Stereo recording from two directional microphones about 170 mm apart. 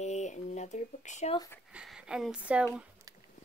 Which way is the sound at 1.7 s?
5° right (ahead or behind).